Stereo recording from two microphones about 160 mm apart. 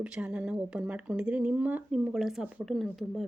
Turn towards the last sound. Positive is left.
turn(degrees=0)  # may be behind; listen again after turning